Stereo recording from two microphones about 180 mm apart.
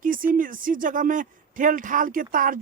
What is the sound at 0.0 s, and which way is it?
Speech, 50° right (ahead or behind).